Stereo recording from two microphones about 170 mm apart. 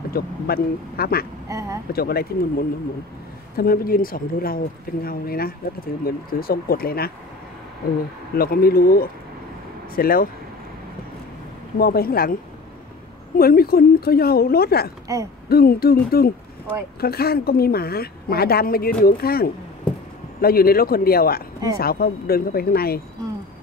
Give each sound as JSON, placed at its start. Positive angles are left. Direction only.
{"t": 0.1, "sound": "speech", "side_deg": 65}
{"t": 1.5, "sound": "speech", "side_deg": -20}
{"t": 1.9, "sound": "speech", "side_deg": 65}
{"t": 8.4, "sound": "speech", "side_deg": 60}
{"t": 11.8, "sound": "speech", "side_deg": 60}
{"t": 13.4, "sound": "speech", "side_deg": 60}
{"t": 15.1, "sound": "hoot", "side_deg": -20}
{"t": 15.4, "sound": "speech", "side_deg": 65}